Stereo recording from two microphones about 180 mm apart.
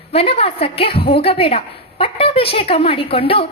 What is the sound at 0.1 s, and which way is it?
A woman's voice, 35° left (ahead or behind).